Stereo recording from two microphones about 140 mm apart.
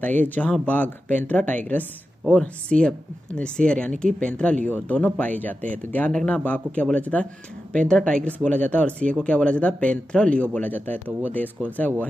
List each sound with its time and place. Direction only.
0.0 s speech: 10° left (ahead or behind)